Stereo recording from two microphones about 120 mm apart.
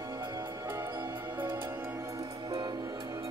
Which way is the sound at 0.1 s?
35° right (ahead or behind).